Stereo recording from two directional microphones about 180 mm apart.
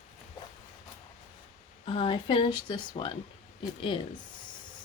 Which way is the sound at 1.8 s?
30° left (ahead or behind).